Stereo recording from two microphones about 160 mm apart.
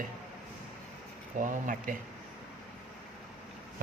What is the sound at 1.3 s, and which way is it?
Speech, 55° right (ahead or behind).